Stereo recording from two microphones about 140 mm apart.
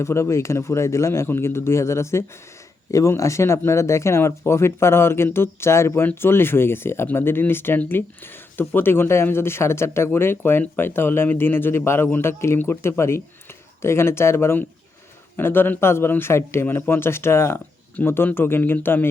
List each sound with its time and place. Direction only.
0.0 s a man's voice: 20° left (ahead or behind)